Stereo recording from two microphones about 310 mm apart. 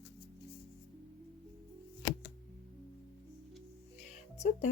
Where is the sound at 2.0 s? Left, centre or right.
Left.